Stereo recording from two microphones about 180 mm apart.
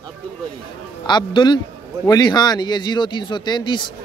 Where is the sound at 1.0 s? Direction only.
25° left (ahead or behind).